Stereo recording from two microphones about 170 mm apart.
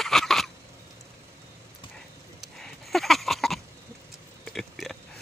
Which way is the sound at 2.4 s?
Centre (ahead or behind).